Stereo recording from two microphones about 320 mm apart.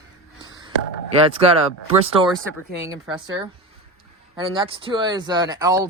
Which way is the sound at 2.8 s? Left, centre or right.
Centre.